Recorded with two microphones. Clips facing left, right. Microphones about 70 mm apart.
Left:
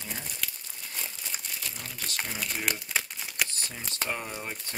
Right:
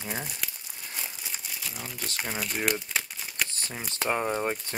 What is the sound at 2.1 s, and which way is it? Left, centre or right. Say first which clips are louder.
Speech: right 3 dB; centre.